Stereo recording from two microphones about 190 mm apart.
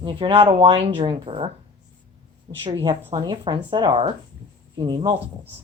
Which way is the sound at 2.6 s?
25° right (ahead or behind).